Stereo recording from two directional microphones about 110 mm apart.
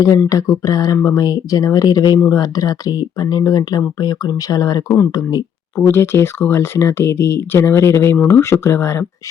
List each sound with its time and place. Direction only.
0.3 s speech: 30° left (ahead or behind)
5.7 s speech: 20° left (ahead or behind)